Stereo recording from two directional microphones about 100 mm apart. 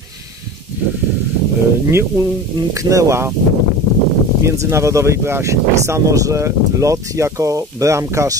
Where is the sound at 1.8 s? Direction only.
25° right (ahead or behind).